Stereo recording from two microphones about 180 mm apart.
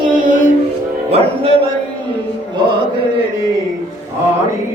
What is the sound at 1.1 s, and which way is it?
Music, 35° right (ahead or behind).